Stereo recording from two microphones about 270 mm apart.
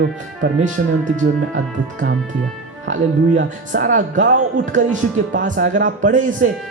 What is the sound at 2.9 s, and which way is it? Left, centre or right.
Speech, right.